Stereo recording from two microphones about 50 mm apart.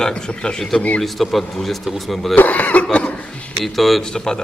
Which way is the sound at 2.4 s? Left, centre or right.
Left.